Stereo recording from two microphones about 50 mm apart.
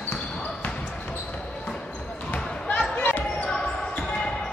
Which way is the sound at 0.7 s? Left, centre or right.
Left.